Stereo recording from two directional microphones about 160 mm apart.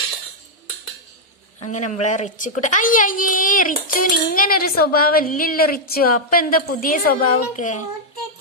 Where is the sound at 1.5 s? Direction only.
50° left (ahead or behind).